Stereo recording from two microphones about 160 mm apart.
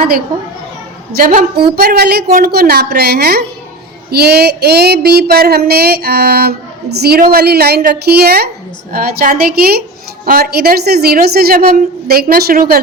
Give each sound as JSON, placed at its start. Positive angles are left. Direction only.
{"t": 1.1, "sound": "a woman's voice", "side_deg": -60}
{"t": 1.7, "sound": "a sound", "side_deg": -70}
{"t": 6.9, "sound": "a woman's voice", "side_deg": -85}
{"t": 8.9, "sound": "a woman's voice", "side_deg": -65}